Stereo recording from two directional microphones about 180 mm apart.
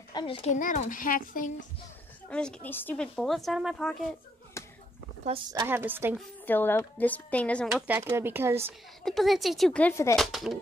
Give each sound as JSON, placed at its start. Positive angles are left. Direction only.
{"t": 0.1, "sound": "speech", "side_deg": 30}
{"t": 0.5, "sound": "a child's voice", "side_deg": 45}
{"t": 2.2, "sound": "speech", "side_deg": 5}
{"t": 4.6, "sound": "a sound", "side_deg": 15}
{"t": 5.5, "sound": "speech", "side_deg": -15}
{"t": 6.1, "sound": "speech", "side_deg": 10}
{"t": 7.8, "sound": "speech", "side_deg": -10}
{"t": 9.0, "sound": "speech", "side_deg": 0}
{"t": 10.1, "sound": "speech", "side_deg": 0}